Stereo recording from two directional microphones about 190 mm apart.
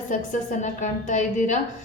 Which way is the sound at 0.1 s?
40° left (ahead or behind).